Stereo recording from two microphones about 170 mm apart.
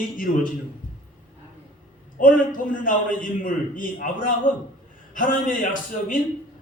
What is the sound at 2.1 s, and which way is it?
A man's voice, 50° left (ahead or behind).